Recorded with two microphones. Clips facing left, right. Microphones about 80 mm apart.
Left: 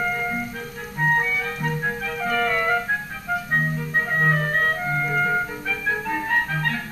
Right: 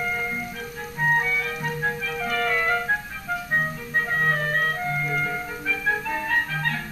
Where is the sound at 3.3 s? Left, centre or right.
Centre.